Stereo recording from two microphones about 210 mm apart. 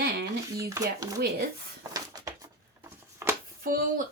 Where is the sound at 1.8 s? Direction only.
15° right (ahead or behind).